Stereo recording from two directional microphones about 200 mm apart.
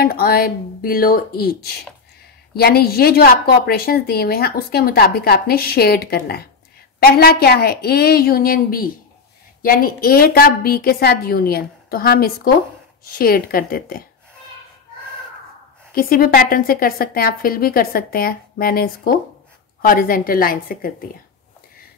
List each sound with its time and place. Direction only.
0.0 s a woman's voice: 50° left (ahead or behind)
15.9 s a woman's voice: 45° left (ahead or behind)